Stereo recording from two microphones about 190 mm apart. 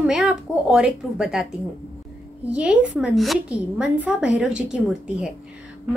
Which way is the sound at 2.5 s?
5° right (ahead or behind).